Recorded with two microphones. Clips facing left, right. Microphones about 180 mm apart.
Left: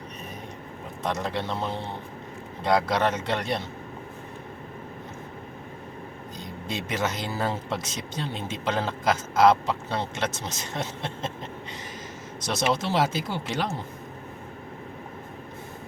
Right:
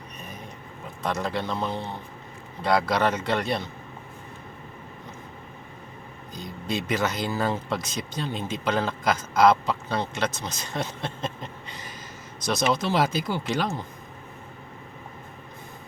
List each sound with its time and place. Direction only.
1.0 s speech: 20° left (ahead or behind)
6.3 s speech: 25° left (ahead or behind)
12.4 s speech: 25° left (ahead or behind)